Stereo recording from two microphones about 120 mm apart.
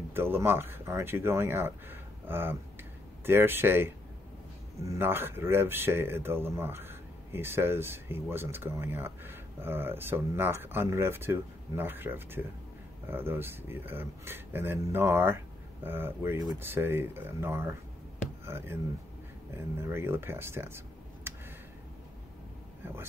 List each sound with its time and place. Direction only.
0.1 s speech: 20° right (ahead or behind)